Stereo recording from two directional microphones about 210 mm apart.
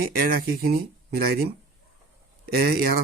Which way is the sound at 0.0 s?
45° right (ahead or behind).